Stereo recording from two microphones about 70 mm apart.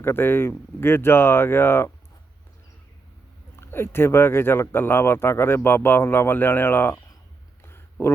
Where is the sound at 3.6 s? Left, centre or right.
Left.